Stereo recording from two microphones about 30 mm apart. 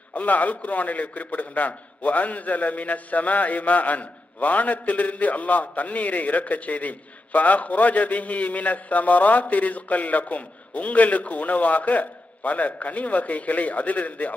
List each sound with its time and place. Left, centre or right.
0.1 s a man's voice: left